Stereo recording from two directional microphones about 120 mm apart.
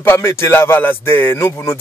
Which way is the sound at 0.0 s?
20° left (ahead or behind).